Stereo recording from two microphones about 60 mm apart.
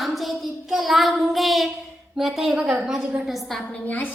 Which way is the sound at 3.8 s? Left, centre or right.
Left.